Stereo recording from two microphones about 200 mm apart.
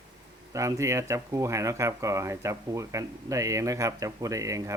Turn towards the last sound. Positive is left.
turn(degrees=-15)  # may be behind; listen again after turning